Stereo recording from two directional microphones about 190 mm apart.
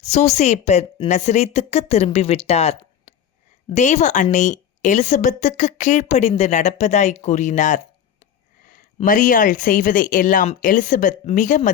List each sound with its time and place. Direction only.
0.0 s a woman's voice: 35° left (ahead or behind)
8.6 s a sound: 45° left (ahead or behind)
9.0 s speech: 45° left (ahead or behind)